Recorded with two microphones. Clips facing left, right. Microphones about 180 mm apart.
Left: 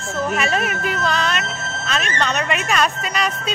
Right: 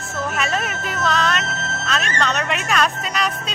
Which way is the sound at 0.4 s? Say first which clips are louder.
Left 3 dB; centre (ahead or behind).